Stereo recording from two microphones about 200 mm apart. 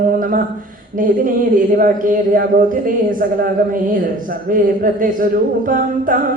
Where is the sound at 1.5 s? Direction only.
45° right (ahead or behind).